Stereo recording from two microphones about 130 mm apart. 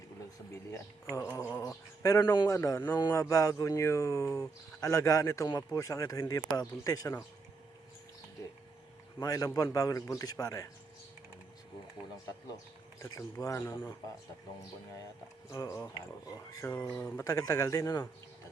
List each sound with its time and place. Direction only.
1.1 s speech: 20° left (ahead or behind)
9.1 s speech: 25° left (ahead or behind)
13.0 s speech: 25° left (ahead or behind)
15.4 s speech: 25° left (ahead or behind)
16.7 s speech: 10° left (ahead or behind)
17.2 s speech: 25° left (ahead or behind)